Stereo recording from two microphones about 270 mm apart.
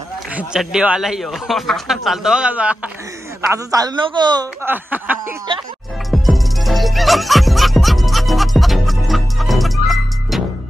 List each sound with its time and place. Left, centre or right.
0.4 s a man's voice: centre
5.5 s music: centre
6.1 s music: centre